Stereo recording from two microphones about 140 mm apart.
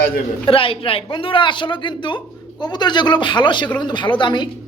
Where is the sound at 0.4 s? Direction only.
40° left (ahead or behind).